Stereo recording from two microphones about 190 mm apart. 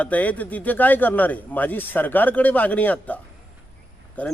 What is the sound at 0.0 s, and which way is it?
A man's voice, 10° left (ahead or behind).